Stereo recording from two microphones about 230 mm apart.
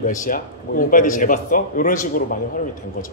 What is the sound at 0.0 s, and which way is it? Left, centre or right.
Speech, left.